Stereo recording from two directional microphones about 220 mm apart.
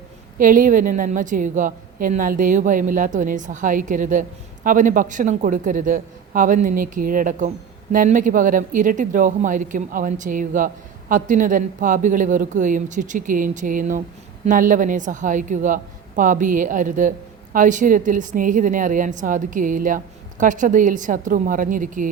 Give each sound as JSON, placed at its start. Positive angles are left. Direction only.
{"t": 0.3, "sound": "a woman's voice", "side_deg": -40}